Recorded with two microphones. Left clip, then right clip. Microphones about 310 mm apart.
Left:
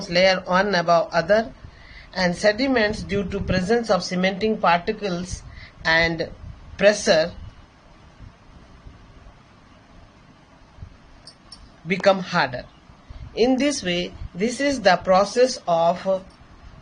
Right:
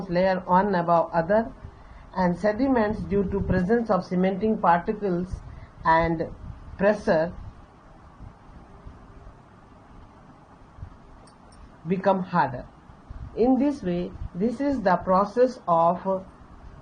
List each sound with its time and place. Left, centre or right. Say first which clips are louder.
0.1 s a woman's voice: left 3 dB; left
11.9 s a woman's voice: left 5 dB; left